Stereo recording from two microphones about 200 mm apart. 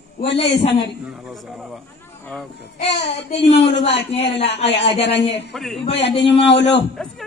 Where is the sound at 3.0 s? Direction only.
30° left (ahead or behind).